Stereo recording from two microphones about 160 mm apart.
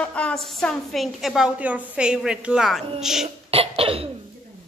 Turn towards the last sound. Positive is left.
turn(degrees=-35)  # may be behind; listen again after turning